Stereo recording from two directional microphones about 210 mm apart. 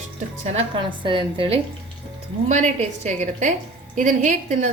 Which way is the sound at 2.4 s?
35° right (ahead or behind).